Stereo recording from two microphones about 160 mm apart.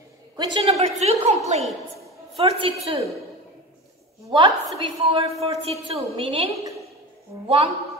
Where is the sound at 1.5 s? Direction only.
45° right (ahead or behind).